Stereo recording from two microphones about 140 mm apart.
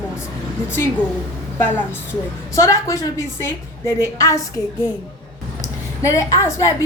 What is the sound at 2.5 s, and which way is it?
A woman's voice, 20° left (ahead or behind).